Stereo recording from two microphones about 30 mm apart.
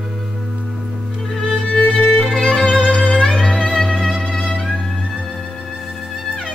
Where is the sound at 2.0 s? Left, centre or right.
Centre.